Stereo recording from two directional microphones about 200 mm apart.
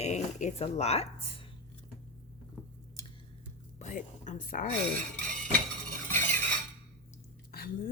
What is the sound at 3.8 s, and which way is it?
Speech, 40° left (ahead or behind).